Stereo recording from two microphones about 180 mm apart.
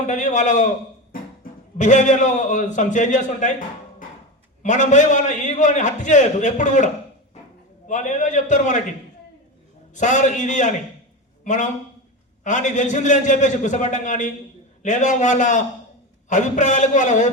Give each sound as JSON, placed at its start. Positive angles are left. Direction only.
{"t": 0.1, "sound": "a man's voice", "side_deg": 40}
{"t": 1.8, "sound": "a man's voice", "side_deg": 45}
{"t": 4.6, "sound": "a man's voice", "side_deg": 45}
{"t": 9.9, "sound": "a man's voice", "side_deg": 45}